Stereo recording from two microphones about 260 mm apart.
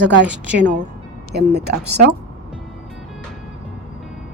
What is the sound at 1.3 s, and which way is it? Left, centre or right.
Speech, right.